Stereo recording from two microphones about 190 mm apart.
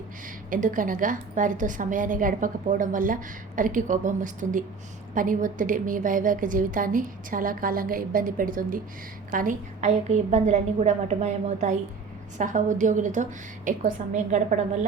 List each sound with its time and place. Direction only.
0.5 s a woman's voice: 45° right (ahead or behind)